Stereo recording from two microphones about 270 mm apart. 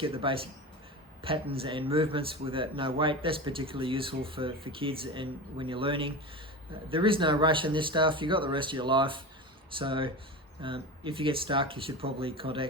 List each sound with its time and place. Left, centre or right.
0.0 s speech: centre